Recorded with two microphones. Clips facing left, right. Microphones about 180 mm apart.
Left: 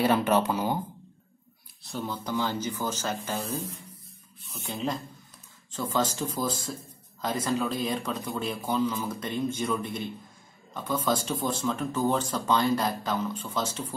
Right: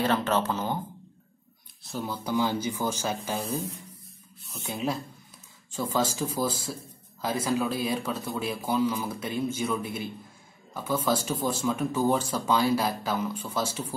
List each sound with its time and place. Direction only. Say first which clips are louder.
0.0 s speech: left 2 dB; 10° left (ahead or behind)
1.9 s speech: right 1 dB; 5° right (ahead or behind)